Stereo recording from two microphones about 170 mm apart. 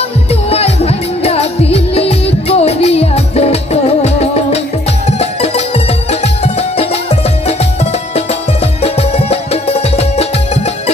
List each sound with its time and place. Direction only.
0.3 s music: 35° left (ahead or behind)